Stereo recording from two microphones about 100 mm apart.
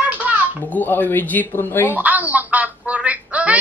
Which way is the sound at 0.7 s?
20° left (ahead or behind).